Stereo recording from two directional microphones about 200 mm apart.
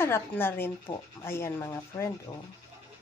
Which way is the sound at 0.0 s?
10° left (ahead or behind).